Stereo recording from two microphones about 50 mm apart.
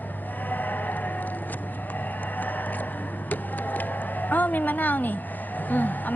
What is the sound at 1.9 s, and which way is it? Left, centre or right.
Vehicle, left.